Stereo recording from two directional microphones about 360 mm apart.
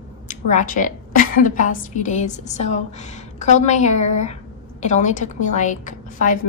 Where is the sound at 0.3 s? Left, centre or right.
Left.